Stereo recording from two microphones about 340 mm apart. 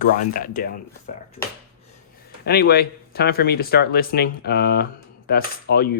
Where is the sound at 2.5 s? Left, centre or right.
Left.